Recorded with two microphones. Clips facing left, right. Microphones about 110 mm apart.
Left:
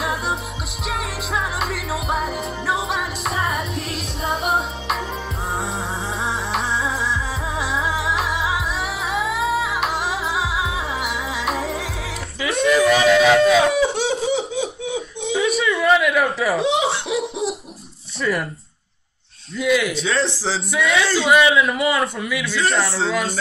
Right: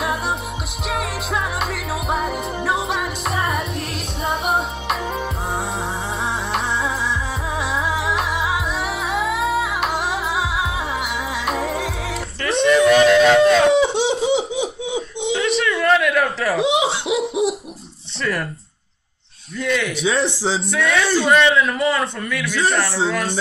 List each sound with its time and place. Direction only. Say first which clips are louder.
0.8 s music: right 2 dB; centre (ahead or behind)
7.5 s music: right 1 dB; centre (ahead or behind)
13.7 s chicken: right 3 dB; 25° right (ahead or behind)
14.2 s cough: right 2 dB; 25° right (ahead or behind)
15.3 s a sound: left 1 dB; 5° left (ahead or behind)
16.7 s laughter: right 1 dB; 25° right (ahead or behind)
18.2 s a man's voice: left 1 dB; 5° left (ahead or behind)
19.6 s speech: left 3 dB; 5° left (ahead or behind)
20.0 s music: right 2 dB; 25° right (ahead or behind)
20.7 s a man's voice: left 1 dB; centre (ahead or behind)